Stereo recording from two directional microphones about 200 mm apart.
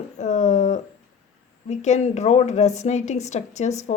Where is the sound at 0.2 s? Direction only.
35° left (ahead or behind).